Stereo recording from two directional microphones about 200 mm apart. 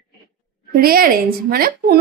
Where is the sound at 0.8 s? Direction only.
45° right (ahead or behind).